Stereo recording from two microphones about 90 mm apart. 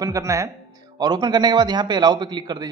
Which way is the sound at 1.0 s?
55° right (ahead or behind).